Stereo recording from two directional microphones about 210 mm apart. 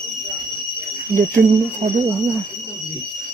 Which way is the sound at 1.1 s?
40° right (ahead or behind).